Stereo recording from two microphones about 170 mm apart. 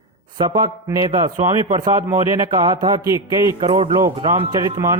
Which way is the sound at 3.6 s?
30° right (ahead or behind).